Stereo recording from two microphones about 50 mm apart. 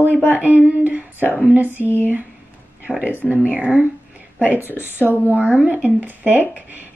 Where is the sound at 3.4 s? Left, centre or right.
Right.